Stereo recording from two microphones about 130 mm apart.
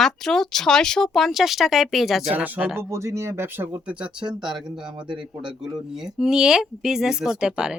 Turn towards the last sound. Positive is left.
turn(degrees=-5)  # may be behind; listen again after turning